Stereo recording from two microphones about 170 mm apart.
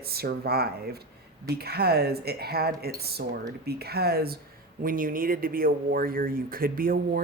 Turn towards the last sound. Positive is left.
turn(degrees=-60)  # may be behind; listen again after turning